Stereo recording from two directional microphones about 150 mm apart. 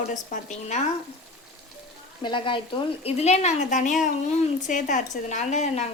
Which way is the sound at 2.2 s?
35° left (ahead or behind).